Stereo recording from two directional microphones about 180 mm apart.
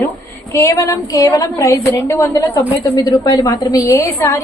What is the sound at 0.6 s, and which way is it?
A woman's voice, 15° left (ahead or behind).